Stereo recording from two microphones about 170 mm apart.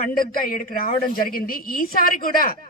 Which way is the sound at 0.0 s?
60° left (ahead or behind).